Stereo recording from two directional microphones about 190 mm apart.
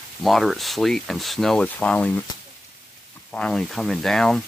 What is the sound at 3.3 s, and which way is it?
Speech, 5° left (ahead or behind).